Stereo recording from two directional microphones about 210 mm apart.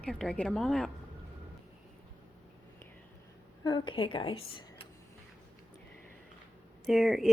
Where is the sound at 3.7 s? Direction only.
20° left (ahead or behind).